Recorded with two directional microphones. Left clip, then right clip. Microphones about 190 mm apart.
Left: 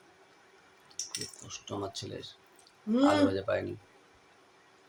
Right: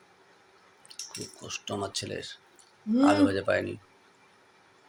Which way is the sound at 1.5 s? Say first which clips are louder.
Right 6 dB; 15° right (ahead or behind).